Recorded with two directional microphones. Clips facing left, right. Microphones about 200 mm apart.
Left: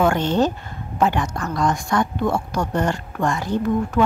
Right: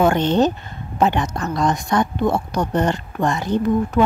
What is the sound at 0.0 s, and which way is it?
Speech, 20° right (ahead or behind).